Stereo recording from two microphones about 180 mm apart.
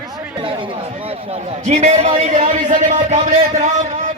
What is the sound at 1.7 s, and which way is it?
Speech, 35° right (ahead or behind).